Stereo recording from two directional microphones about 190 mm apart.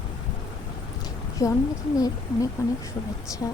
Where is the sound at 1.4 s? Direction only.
15° left (ahead or behind).